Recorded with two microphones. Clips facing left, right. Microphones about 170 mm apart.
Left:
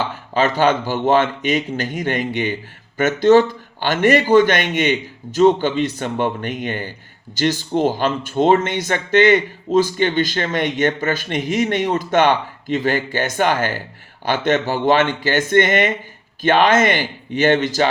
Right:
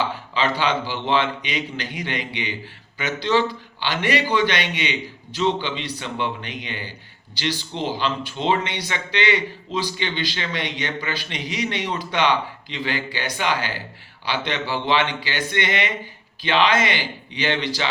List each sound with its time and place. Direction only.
0.3 s speech: 45° left (ahead or behind)